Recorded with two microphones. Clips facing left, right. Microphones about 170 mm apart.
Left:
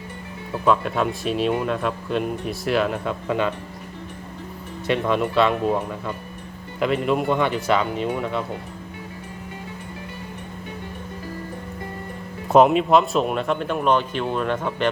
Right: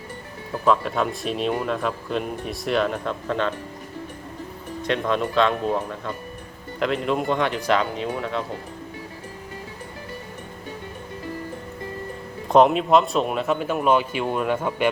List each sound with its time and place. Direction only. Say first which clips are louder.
0.6 s speech: left 1 dB; centre (ahead or behind)
4.9 s speech: left 2 dB; 5° left (ahead or behind)
12.5 s speech: left 1 dB; 5° left (ahead or behind)